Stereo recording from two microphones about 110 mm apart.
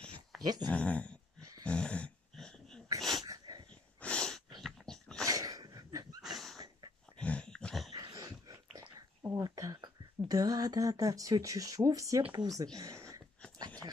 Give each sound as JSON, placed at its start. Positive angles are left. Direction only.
{"t": 0.7, "sound": "speech", "side_deg": 10}
{"t": 1.6, "sound": "a sound", "side_deg": 10}
{"t": 3.0, "sound": "wheeze", "side_deg": 0}
{"t": 3.3, "sound": "dog", "side_deg": -35}
{"t": 4.0, "sound": "sneeze", "side_deg": 10}
{"t": 4.6, "sound": "dog", "side_deg": 5}
{"t": 5.2, "sound": "a sound", "side_deg": -35}
{"t": 6.2, "sound": "dog", "side_deg": 0}
{"t": 7.9, "sound": "dog", "side_deg": -40}
{"t": 9.2, "sound": "speech", "side_deg": -30}
{"t": 12.2, "sound": "speech", "side_deg": -45}
{"t": 12.7, "sound": "a sound", "side_deg": -30}